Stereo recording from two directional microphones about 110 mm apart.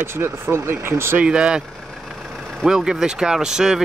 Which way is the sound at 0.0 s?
20° right (ahead or behind).